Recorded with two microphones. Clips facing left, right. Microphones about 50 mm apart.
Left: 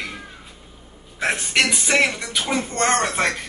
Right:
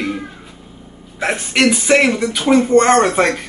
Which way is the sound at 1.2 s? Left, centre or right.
Centre.